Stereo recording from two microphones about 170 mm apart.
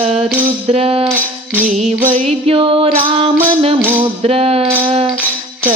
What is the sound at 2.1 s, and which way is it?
Music, 40° right (ahead or behind).